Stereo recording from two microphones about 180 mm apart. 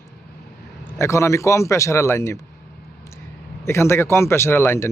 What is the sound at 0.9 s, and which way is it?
Speech, 15° left (ahead or behind).